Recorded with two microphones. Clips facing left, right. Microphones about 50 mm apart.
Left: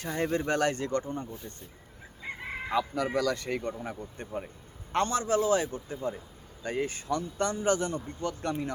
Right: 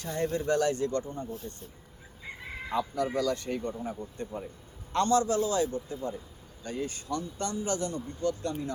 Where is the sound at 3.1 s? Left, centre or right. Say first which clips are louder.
Left 2 dB; left.